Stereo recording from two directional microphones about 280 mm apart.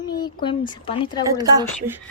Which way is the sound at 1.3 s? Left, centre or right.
Centre.